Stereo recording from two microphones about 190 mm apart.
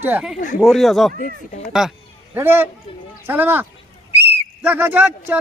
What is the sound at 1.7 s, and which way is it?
A man's voice, 5° right (ahead or behind).